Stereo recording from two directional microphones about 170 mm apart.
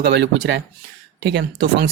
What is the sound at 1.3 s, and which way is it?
Speech, 70° right (ahead or behind).